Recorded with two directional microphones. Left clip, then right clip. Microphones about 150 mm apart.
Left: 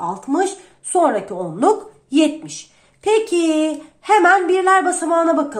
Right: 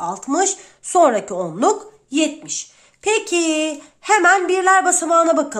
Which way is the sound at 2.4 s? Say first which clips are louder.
Right 5 dB; 30° right (ahead or behind).